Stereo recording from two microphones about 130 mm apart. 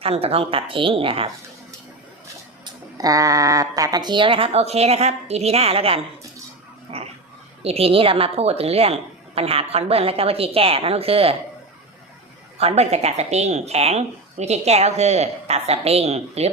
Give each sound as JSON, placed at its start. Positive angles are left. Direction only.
{"t": 0.0, "sound": "speech", "side_deg": -50}
{"t": 2.6, "sound": "speech", "side_deg": -30}
{"t": 6.9, "sound": "dog", "side_deg": -50}
{"t": 7.6, "sound": "speech", "side_deg": -50}
{"t": 12.5, "sound": "speech", "side_deg": -55}